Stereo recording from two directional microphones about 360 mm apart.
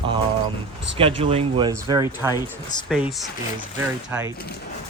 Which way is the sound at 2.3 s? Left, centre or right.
Centre.